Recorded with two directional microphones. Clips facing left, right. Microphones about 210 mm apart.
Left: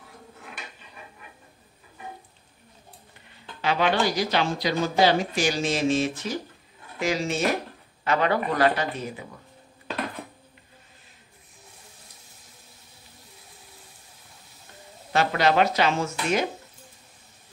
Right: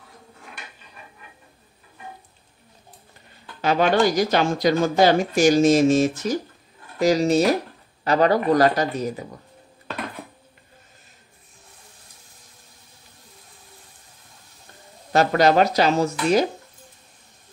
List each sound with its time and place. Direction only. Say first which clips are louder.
3.6 s speech: right 5 dB; 45° right (ahead or behind)
15.1 s speech: right 5 dB; 40° right (ahead or behind)